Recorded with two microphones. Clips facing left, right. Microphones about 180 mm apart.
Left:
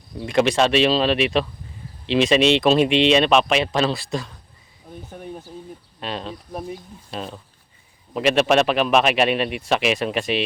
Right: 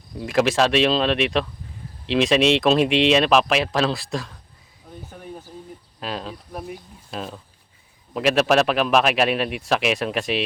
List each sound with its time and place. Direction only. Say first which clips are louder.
0.2 s a man's voice: left 1 dB; centre (ahead or behind)
6.0 s a man's voice: even; centre (ahead or behind)
6.5 s speech: left 3 dB; 25° left (ahead or behind)
7.1 s a man's voice: even; centre (ahead or behind)